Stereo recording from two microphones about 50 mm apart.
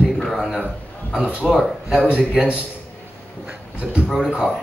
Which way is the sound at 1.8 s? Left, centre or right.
Centre.